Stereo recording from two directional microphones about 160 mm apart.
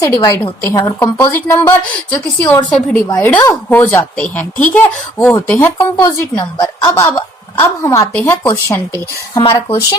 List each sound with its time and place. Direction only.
0.0 s a woman's voice: 20° left (ahead or behind)
9.4 s speech: 35° left (ahead or behind)